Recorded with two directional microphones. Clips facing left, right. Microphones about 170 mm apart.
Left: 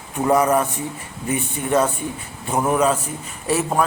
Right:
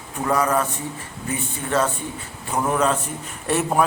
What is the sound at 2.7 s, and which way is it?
A man's voice, 10° left (ahead or behind).